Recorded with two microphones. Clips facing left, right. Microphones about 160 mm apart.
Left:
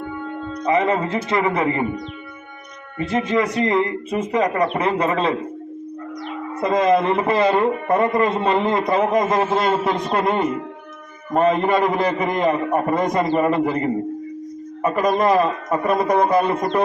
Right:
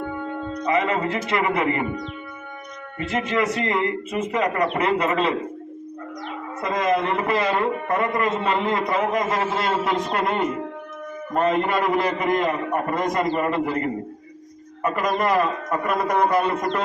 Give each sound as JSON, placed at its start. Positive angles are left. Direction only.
{"t": 0.6, "sound": "a man's voice", "side_deg": 30}
{"t": 3.0, "sound": "a man's voice", "side_deg": 30}
{"t": 6.6, "sound": "a man's voice", "side_deg": 25}